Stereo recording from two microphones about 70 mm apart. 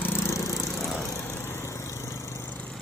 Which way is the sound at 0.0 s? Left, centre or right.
Left.